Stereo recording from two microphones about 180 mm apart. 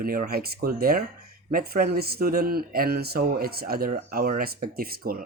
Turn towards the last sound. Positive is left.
turn(degrees=-55)  # may be behind; listen again after turning